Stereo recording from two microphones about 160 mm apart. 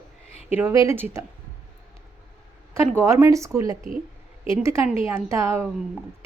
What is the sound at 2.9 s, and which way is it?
A woman's voice, 15° right (ahead or behind).